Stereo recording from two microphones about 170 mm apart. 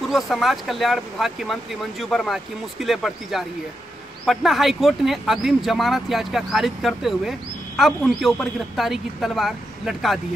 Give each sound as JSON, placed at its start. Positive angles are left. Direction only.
{"t": 0.1, "sound": "speech", "side_deg": 0}